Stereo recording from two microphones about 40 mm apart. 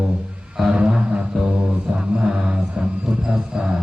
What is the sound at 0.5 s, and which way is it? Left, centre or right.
Music, centre.